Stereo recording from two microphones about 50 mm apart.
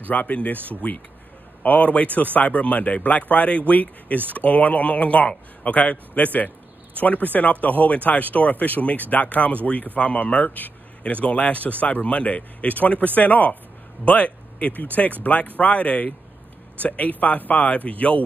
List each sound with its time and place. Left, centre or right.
0.1 s speech: left